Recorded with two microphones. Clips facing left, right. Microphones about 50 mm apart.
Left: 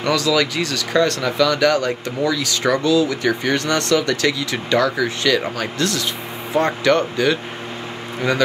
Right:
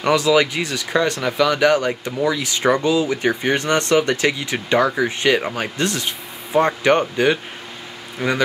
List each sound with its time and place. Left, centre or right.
0.0 s speech: right